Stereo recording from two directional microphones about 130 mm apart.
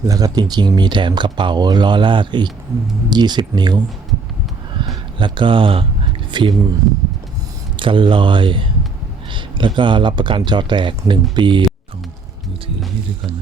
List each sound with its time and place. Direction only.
0.0 s speech: 25° right (ahead or behind)
4.8 s a sound: 40° right (ahead or behind)
7.8 s speech: 40° right (ahead or behind)